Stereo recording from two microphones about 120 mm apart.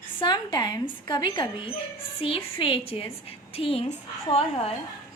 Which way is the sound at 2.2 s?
50° left (ahead or behind).